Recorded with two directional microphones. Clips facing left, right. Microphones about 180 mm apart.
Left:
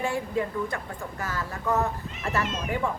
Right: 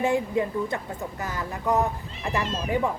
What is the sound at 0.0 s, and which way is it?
Speech, 20° right (ahead or behind).